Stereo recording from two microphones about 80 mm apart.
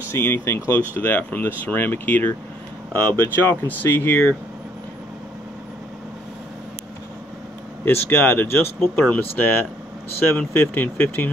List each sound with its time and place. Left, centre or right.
0.1 s speech: left
7.8 s speech: left